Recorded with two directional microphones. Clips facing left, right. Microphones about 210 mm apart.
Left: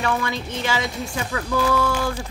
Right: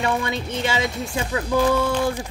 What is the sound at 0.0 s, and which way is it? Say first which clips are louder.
Speech: right 1 dB; 20° right (ahead or behind).